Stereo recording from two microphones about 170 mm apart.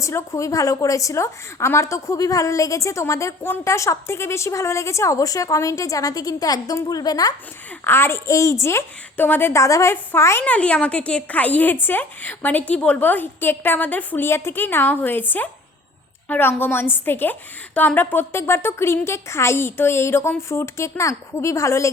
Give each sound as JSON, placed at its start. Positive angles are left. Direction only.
{"t": 0.0, "sound": "a woman's voice", "side_deg": 15}